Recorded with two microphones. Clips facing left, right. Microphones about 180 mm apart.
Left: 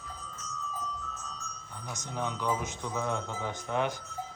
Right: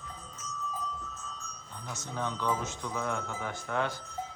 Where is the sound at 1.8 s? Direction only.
15° left (ahead or behind).